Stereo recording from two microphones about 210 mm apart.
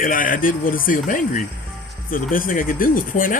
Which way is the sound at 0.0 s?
40° left (ahead or behind).